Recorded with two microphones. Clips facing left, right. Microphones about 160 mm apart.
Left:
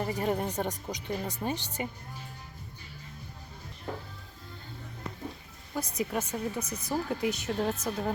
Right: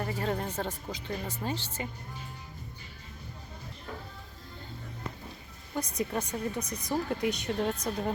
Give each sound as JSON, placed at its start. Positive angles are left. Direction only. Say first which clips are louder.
{"t": 0.0, "sound": "speech", "louder": "left 2 dB", "side_deg": 15}
{"t": 5.7, "sound": "speech", "louder": "even", "side_deg": 5}